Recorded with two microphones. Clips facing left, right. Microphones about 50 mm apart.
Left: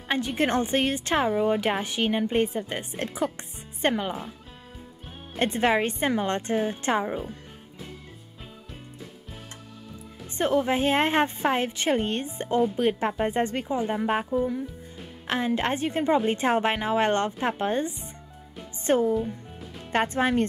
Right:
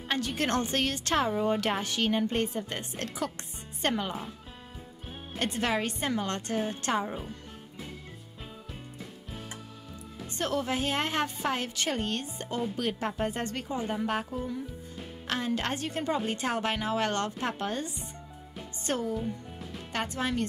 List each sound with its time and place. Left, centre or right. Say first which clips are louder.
0.1 s a woman's voice: left 4 dB; centre
5.4 s a woman's voice: left 6 dB; left
10.3 s a woman's voice: left 7 dB; left
19.1 s music: left 5 dB; centre
19.9 s speech: left 8 dB; left